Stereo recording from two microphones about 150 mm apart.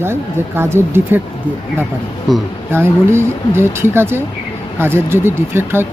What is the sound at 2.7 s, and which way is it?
Speech, 15° right (ahead or behind).